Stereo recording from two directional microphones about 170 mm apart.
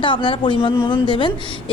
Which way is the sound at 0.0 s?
30° left (ahead or behind).